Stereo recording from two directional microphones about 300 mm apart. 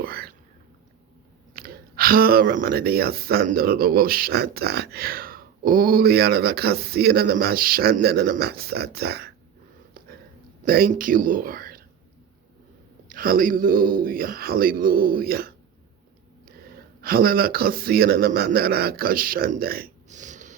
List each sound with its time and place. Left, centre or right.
0.0 s whispering: right
1.5 s speech: right
10.7 s speech: right
13.1 s speech: right
17.0 s speech: right